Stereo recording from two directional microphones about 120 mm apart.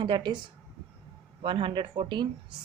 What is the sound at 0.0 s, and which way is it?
A woman's voice, 40° right (ahead or behind).